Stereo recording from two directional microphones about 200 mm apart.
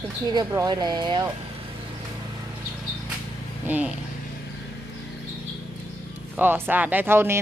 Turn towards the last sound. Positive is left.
turn(degrees=-10)  # may be behind; listen again after turning